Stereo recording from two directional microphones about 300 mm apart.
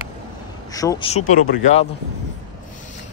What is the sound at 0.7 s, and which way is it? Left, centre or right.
Speech, centre.